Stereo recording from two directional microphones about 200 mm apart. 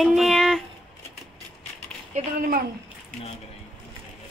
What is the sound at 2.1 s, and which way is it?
Speech, 35° right (ahead or behind).